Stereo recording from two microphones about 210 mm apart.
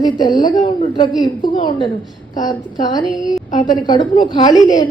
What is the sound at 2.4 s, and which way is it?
A woman's voice, 20° left (ahead or behind).